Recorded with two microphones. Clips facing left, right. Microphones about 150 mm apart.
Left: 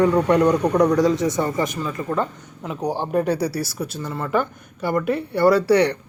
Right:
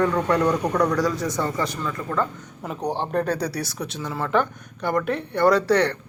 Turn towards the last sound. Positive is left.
turn(degrees=10)  # may be behind; listen again after turning